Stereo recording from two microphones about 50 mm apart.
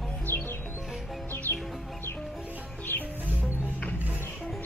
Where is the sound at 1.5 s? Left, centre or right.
Right.